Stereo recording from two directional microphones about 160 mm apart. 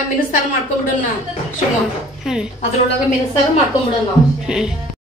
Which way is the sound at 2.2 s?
5° right (ahead or behind).